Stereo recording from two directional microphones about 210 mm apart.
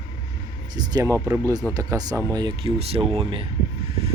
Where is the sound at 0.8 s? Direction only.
15° right (ahead or behind).